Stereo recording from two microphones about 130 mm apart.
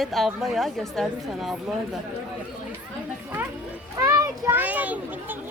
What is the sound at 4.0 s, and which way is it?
Children playing, 25° right (ahead or behind).